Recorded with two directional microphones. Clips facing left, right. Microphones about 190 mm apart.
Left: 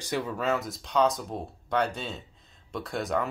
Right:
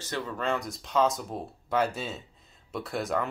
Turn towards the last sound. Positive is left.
turn(degrees=0)  # may be behind; listen again after turning